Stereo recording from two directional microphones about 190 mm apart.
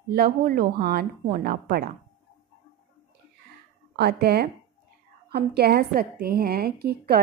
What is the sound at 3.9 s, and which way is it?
A woman's voice, 60° right (ahead or behind).